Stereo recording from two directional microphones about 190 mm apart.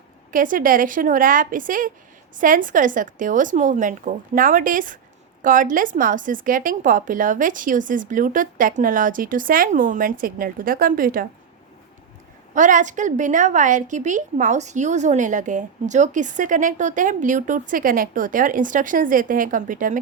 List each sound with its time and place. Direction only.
0.3 s a woman's voice: 45° right (ahead or behind)
12.5 s a woman's voice: 40° right (ahead or behind)